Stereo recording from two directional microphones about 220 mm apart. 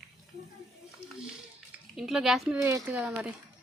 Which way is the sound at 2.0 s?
Centre (ahead or behind).